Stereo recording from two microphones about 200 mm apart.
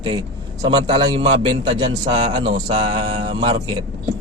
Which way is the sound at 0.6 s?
20° right (ahead or behind).